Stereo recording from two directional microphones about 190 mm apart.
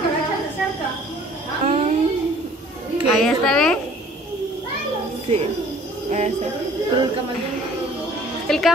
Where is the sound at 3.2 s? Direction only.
Centre (ahead or behind).